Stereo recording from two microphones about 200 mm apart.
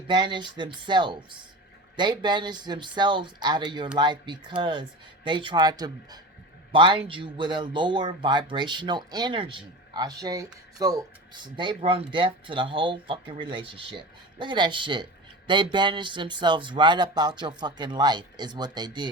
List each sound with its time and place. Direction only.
0.1 s speech: 20° right (ahead or behind)